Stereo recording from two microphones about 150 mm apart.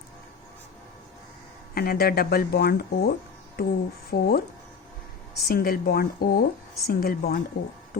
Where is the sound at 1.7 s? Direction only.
90° left.